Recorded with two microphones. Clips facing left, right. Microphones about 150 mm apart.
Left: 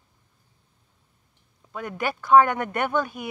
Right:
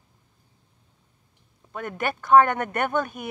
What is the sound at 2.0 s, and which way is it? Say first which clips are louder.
Speech: even; 50° right (ahead or behind).